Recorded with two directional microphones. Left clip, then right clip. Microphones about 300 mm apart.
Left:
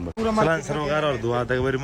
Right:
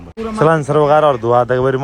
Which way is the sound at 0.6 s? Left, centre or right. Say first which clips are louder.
Right 13 dB; centre.